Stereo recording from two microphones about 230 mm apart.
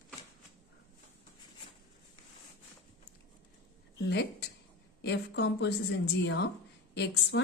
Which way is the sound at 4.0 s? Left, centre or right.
Left.